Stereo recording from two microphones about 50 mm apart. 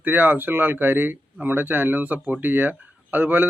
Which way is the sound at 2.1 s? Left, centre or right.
Right.